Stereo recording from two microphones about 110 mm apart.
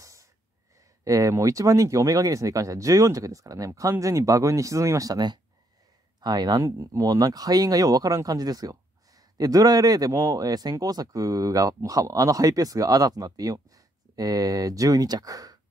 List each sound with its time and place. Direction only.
0.0 s wheeze: 30° right (ahead or behind)
0.7 s speech: 30° right (ahead or behind)